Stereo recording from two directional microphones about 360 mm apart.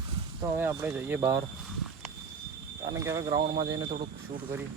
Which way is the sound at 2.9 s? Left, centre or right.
Centre.